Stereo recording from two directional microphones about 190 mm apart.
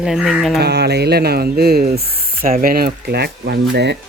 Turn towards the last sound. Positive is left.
turn(degrees=-65)  # may be behind; listen again after turning